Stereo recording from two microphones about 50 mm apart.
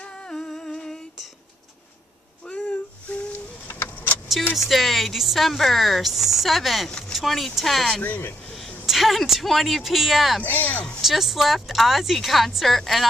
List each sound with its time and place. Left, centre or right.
0.0 s humming: centre
3.1 s a sound: left
3.6 s vehicle: left
4.6 s a woman's voice: centre
10.4 s speech: left
11.0 s a woman's voice: centre